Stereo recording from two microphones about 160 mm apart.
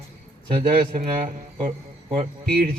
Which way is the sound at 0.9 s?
55° right (ahead or behind).